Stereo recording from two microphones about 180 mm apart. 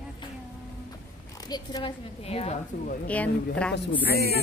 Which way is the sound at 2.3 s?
35° left (ahead or behind).